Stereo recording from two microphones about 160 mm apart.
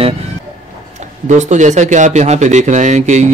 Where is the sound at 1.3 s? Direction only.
50° right (ahead or behind).